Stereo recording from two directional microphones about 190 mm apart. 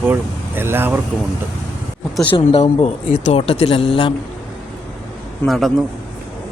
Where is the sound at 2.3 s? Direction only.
30° left (ahead or behind).